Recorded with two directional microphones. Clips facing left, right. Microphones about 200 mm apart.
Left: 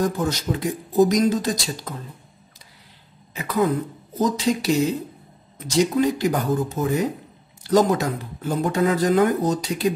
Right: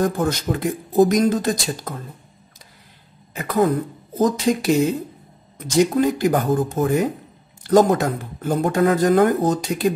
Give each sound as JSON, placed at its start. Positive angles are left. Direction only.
{"t": 0.0, "sound": "speech", "side_deg": -55}
{"t": 3.3, "sound": "speech", "side_deg": -50}